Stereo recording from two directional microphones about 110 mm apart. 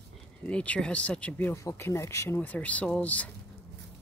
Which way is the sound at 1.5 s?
25° left (ahead or behind).